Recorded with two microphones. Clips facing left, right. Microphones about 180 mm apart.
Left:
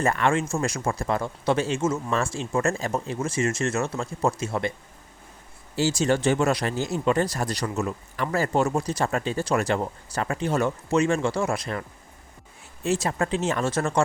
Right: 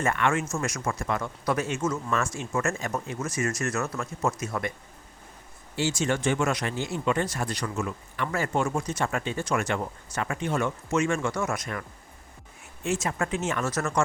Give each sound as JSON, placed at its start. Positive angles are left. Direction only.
{"t": 0.0, "sound": "speech", "side_deg": 35}
{"t": 5.7, "sound": "speech", "side_deg": 35}